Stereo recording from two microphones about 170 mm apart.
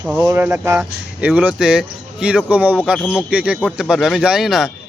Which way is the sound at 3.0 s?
10° left (ahead or behind).